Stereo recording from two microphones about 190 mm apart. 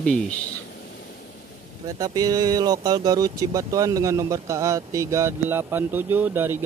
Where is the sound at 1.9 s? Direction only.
20° right (ahead or behind).